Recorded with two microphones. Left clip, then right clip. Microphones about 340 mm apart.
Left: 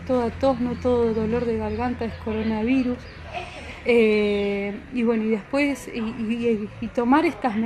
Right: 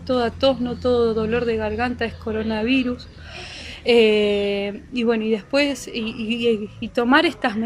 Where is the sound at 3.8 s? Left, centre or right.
Right.